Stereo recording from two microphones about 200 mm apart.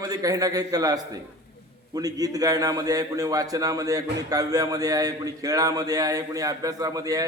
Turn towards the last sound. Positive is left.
turn(degrees=-15)  # may be behind; listen again after turning